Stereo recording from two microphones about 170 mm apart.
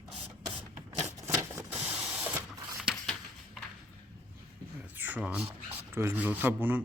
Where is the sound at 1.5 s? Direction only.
10° right (ahead or behind).